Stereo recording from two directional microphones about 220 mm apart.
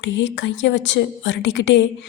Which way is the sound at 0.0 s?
55° left (ahead or behind).